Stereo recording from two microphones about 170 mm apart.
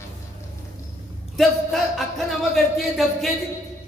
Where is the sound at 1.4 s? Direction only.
Centre (ahead or behind).